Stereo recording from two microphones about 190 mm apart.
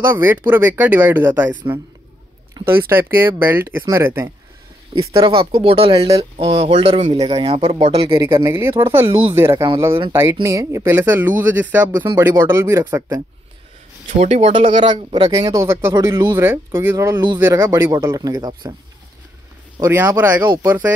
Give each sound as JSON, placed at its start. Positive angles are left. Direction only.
{"t": 0.0, "sound": "speech", "side_deg": -10}
{"t": 5.1, "sound": "speech", "side_deg": -25}
{"t": 8.1, "sound": "speech", "side_deg": -15}
{"t": 14.1, "sound": "speech", "side_deg": -35}
{"t": 19.8, "sound": "speech", "side_deg": -10}